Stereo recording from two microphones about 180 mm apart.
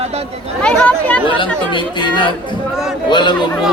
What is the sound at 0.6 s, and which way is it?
Speech, 5° left (ahead or behind).